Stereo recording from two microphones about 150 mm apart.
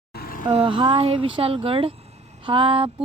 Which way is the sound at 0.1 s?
85° left.